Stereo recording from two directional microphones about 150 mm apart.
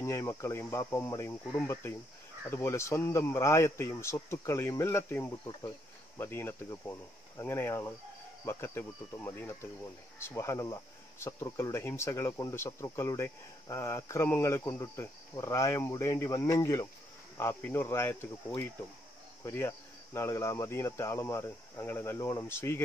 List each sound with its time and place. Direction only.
0.0 s speech: 20° left (ahead or behind)
1.7 s cricket: 15° left (ahead or behind)
10.1 s speech: 15° left (ahead or behind)
17.4 s cricket: 15° left (ahead or behind)